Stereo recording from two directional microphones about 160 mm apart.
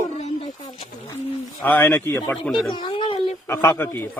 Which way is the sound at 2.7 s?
30° left (ahead or behind).